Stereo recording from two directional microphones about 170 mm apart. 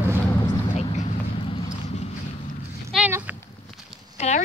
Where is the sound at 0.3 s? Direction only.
25° left (ahead or behind).